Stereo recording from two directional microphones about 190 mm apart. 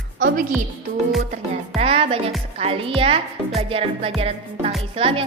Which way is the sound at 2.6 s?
30° right (ahead or behind).